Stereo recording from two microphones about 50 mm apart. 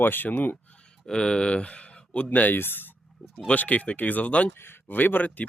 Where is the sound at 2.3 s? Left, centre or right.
Left.